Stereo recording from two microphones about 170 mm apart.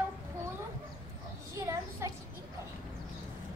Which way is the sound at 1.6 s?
15° right (ahead or behind).